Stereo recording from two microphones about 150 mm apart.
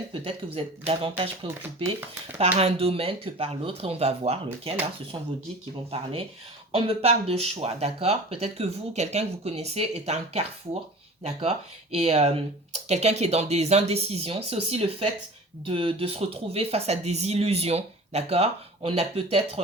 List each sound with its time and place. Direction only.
0.1 s speech: 40° right (ahead or behind)
1.5 s speech: 15° right (ahead or behind)
2.6 s speech: 40° right (ahead or behind)
5.9 s speech: 40° right (ahead or behind)